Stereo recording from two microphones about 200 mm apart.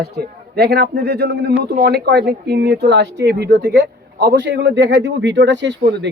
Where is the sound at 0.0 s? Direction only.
55° right (ahead or behind).